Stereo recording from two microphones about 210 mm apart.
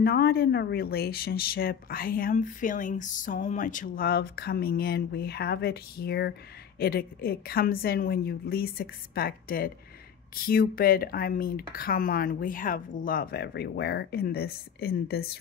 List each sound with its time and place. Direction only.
0.0 s speech: 45° left (ahead or behind)